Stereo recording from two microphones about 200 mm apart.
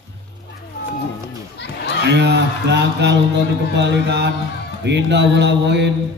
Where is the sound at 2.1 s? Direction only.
60° right (ahead or behind).